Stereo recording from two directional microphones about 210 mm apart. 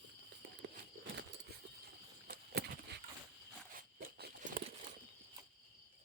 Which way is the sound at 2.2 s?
45° right (ahead or behind).